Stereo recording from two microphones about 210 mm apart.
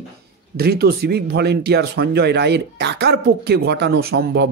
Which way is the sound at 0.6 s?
50° right (ahead or behind).